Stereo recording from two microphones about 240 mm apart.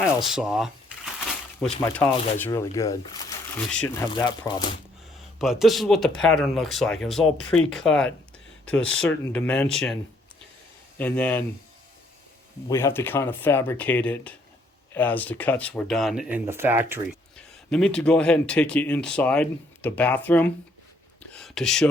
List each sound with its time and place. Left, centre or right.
0.2 s speech: centre
1.8 s speech: centre
2.0 s speech: left
2.4 s speech: centre
5.4 s speech: centre
12.6 s speech: centre
17.3 s speech: centre